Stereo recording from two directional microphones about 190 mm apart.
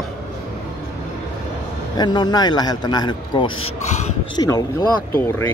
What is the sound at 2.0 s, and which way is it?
A man's voice, 20° left (ahead or behind).